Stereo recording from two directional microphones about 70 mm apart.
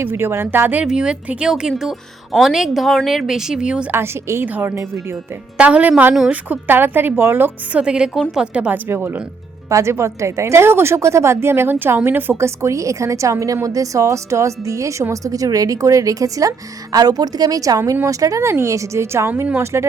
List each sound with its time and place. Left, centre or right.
0.0 s speech: right
0.9 s speech: centre
3.9 s speech: right
4.4 s a woman's voice: right
7.8 s speech: centre
8.9 s speech: right
9.6 s speech: right